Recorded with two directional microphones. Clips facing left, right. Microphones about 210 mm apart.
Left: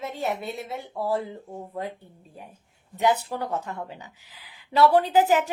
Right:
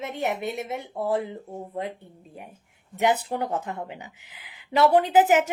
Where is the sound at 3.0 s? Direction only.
20° right (ahead or behind).